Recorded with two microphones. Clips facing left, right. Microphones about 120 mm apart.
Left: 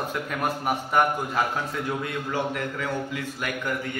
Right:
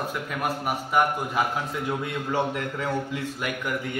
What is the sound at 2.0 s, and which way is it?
Speech, 25° right (ahead or behind).